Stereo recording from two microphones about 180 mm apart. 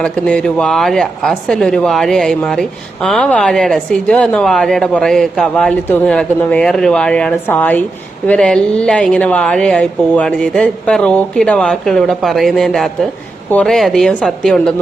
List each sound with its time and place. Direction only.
0.0 s speech: 5° left (ahead or behind)